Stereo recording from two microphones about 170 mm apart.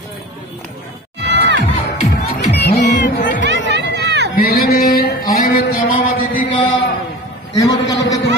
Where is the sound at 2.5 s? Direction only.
75° left (ahead or behind).